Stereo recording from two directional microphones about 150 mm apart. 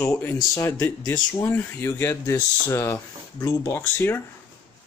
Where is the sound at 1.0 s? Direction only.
30° left (ahead or behind).